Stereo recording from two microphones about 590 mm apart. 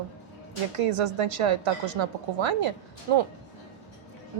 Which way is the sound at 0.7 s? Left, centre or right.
Right.